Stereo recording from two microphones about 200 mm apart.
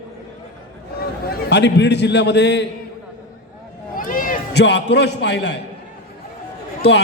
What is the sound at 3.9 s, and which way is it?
A man's voice, 45° left (ahead or behind).